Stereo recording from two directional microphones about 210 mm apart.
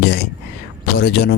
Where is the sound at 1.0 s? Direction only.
55° left (ahead or behind).